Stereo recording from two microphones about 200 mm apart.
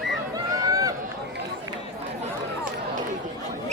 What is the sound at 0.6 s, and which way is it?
Run, 15° right (ahead or behind).